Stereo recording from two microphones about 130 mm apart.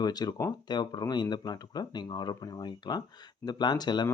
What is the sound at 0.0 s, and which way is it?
Speech, 30° left (ahead or behind).